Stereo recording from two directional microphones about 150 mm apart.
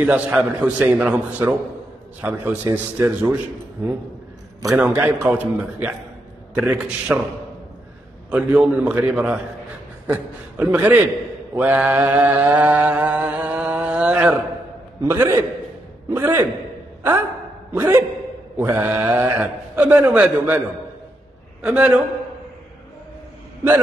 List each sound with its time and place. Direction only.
0.0 s a man's voice: 10° right (ahead or behind)
4.7 s a man's voice: 10° right (ahead or behind)
8.3 s a man's voice: 10° right (ahead or behind)
12.7 s a sound: 15° right (ahead or behind)
15.0 s mantra: 20° right (ahead or behind)
16.1 s a man's voice: 15° right (ahead or behind)
17.7 s a man's voice: 15° right (ahead or behind)
18.6 s mantra: 20° right (ahead or behind)
19.4 s a man's voice: 10° right (ahead or behind)
21.6 s a man's voice: 5° right (ahead or behind)